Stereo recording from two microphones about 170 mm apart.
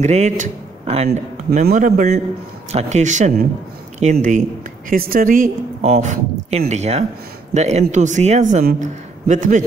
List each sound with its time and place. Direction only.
0.0 s a man's voice: 40° right (ahead or behind)
4.8 s speech: 60° right (ahead or behind)
5.8 s a man's voice: 40° right (ahead or behind)